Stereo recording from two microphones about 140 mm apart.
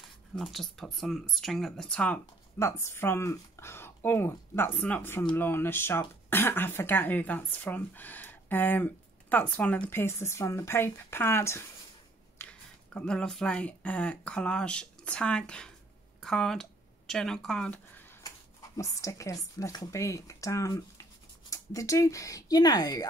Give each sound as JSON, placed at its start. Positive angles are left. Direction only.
{"t": 0.4, "sound": "speech", "side_deg": 0}
{"t": 2.6, "sound": "speech", "side_deg": 20}
{"t": 12.4, "sound": "speech", "side_deg": 5}
{"t": 18.2, "sound": "speech", "side_deg": 25}